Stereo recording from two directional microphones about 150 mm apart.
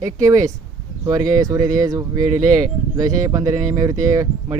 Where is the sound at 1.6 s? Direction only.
60° right (ahead or behind).